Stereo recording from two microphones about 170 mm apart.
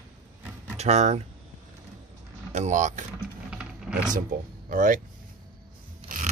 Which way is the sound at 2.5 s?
45° right (ahead or behind).